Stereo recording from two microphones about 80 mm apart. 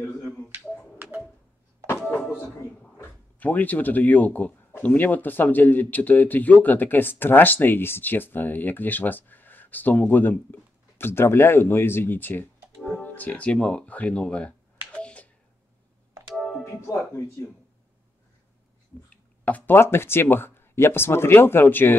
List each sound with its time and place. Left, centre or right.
3.0 s speech: left
12.7 s music: centre
13.0 s speech: centre
14.9 s a sound: centre
16.3 s music: centre
16.8 s speech: left
19.4 s speech: left